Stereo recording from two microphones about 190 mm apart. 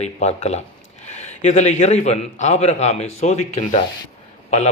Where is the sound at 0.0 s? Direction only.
35° left (ahead or behind).